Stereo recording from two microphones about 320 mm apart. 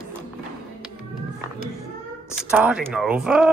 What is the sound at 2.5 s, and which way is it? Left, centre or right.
Speech, centre.